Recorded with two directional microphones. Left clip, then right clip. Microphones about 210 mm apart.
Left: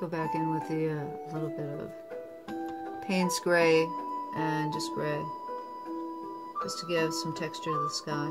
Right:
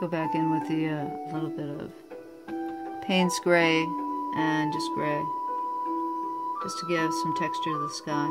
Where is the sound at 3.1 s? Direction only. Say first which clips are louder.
Right 4 dB; 30° right (ahead or behind).